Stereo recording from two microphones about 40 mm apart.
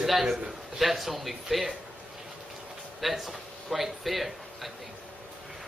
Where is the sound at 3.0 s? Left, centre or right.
Centre.